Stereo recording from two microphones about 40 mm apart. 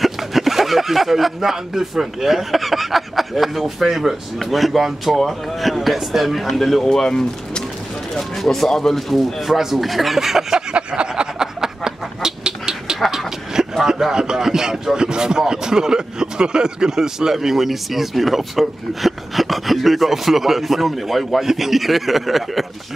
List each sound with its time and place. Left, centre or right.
0.0 s speech: centre
6.9 s speech: centre
8.2 s speech: centre
10.7 s a sound: right
13.8 s speech: centre